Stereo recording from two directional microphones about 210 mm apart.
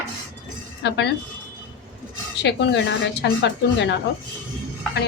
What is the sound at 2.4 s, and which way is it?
A woman's voice, 55° left (ahead or behind).